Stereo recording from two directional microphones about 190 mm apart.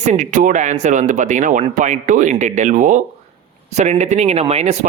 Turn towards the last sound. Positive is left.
turn(degrees=-35)  # may be behind; listen again after turning